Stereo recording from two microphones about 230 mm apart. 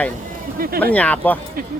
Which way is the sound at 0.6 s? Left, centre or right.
Right.